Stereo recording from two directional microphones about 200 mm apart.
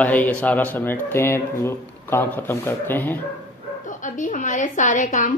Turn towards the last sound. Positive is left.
turn(degrees=40)  # may be behind; listen again after turning